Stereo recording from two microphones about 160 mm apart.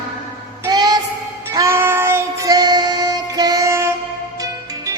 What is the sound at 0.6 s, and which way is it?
Child singing, 25° right (ahead or behind).